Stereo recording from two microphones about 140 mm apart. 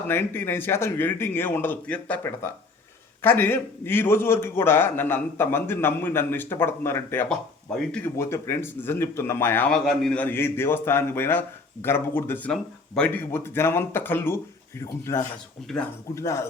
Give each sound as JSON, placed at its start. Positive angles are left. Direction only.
{"t": 0.1, "sound": "a man's voice", "side_deg": 15}
{"t": 9.7, "sound": "a man's voice", "side_deg": 5}
{"t": 15.7, "sound": "speech", "side_deg": 5}
{"t": 16.1, "sound": "speech", "side_deg": 20}